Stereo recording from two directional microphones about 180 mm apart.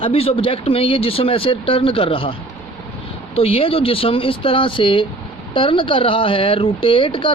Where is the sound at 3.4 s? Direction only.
30° left (ahead or behind).